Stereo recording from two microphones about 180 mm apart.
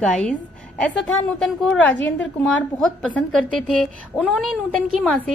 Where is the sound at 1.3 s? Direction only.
5° left (ahead or behind).